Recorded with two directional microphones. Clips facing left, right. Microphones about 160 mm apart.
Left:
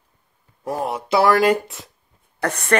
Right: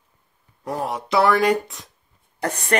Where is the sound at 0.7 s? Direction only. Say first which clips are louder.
Left 2 dB; centre (ahead or behind).